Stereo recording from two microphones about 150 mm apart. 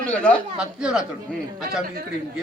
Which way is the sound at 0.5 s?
5° right (ahead or behind).